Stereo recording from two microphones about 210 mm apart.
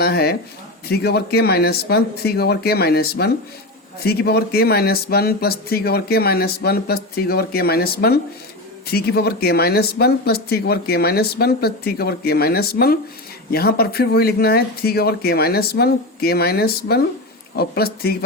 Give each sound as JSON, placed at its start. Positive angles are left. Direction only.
{"t": 0.0, "sound": "speech", "side_deg": 50}